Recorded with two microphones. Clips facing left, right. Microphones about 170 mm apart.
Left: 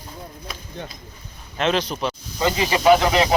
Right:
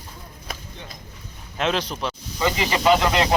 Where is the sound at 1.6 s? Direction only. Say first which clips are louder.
Left 2 dB; centre (ahead or behind).